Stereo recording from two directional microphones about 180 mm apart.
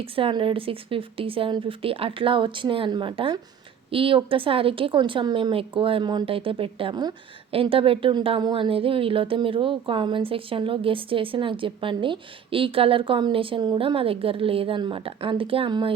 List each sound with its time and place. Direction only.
0.0 s a woman's voice: 30° right (ahead or behind)